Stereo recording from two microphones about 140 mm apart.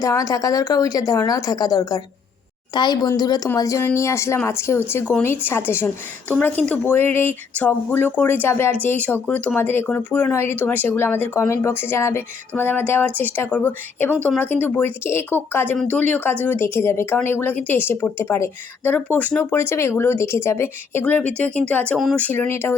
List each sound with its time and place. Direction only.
0.0 s a woman's voice: 25° left (ahead or behind); by 22.2 s centre (ahead or behind)
22.2 s speech: 15° left (ahead or behind)